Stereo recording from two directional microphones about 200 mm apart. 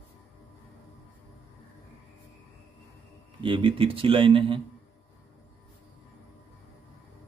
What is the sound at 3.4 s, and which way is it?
A man's voice, 25° right (ahead or behind).